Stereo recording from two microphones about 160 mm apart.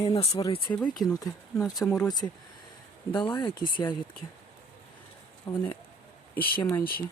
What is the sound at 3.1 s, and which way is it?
Speech, 30° left (ahead or behind).